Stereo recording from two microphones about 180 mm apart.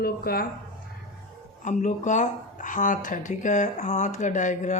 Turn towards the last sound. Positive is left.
turn(degrees=45)  # may be behind; listen again after turning